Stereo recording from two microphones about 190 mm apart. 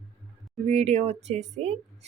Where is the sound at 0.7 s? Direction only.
35° right (ahead or behind).